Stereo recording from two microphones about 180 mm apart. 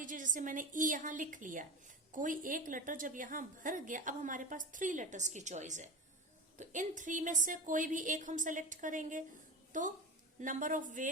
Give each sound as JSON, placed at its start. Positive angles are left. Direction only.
{"t": 0.0, "sound": "a woman's voice", "side_deg": -45}